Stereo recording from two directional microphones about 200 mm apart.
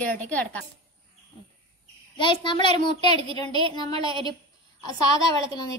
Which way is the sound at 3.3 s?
25° right (ahead or behind).